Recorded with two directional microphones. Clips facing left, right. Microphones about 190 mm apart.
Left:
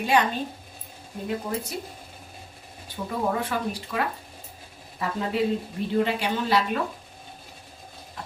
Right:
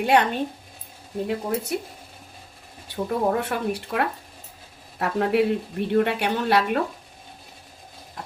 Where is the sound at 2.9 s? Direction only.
70° right (ahead or behind).